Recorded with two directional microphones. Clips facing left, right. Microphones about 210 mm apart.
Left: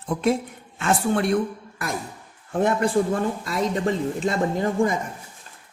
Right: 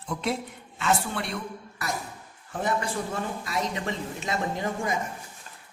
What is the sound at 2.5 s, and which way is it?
Speech, 55° left (ahead or behind).